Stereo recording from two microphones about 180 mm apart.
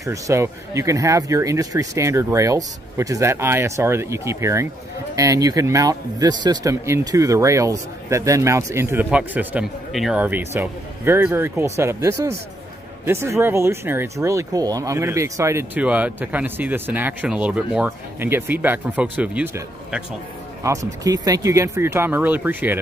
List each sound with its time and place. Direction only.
0.0 s speech: 15° right (ahead or behind)